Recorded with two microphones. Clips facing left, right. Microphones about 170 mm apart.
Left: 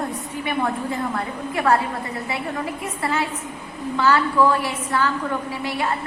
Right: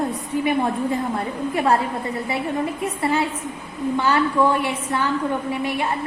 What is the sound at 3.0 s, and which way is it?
A woman's voice, 20° right (ahead or behind).